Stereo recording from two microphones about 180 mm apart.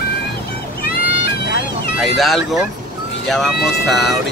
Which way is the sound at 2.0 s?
Centre (ahead or behind).